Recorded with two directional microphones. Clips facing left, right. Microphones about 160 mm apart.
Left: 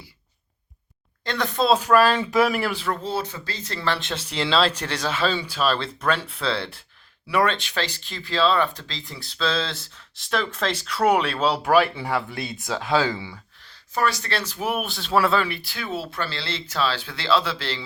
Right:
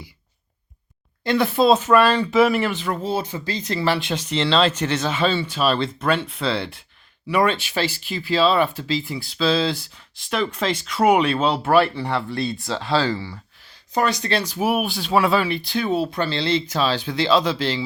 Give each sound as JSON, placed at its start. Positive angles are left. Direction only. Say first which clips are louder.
{"t": 1.2, "sound": "speech", "louder": "right 6 dB", "side_deg": -10}
{"t": 11.5, "sound": "speech", "louder": "even", "side_deg": 5}
{"t": 12.4, "sound": "speech", "louder": "right 7 dB", "side_deg": 20}
{"t": 12.6, "sound": "speech", "louder": "left 1 dB", "side_deg": 0}
{"t": 13.9, "sound": "speech", "louder": "right 3 dB", "side_deg": -20}